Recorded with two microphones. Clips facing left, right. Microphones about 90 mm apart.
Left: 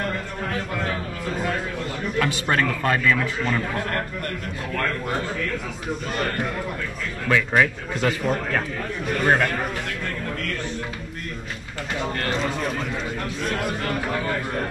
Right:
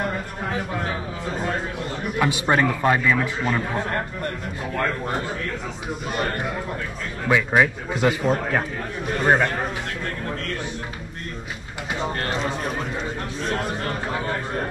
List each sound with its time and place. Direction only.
0.0 s speech: 15° right (ahead or behind)
2.1 s a man's voice: 15° right (ahead or behind)
7.2 s a man's voice: 15° right (ahead or behind)
12.0 s a man's voice: 25° right (ahead or behind)